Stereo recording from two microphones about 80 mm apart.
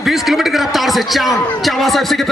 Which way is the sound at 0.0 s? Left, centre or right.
Centre.